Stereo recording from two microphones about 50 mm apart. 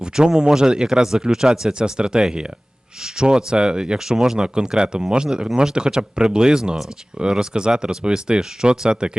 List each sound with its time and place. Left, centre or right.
0.0 s speech: centre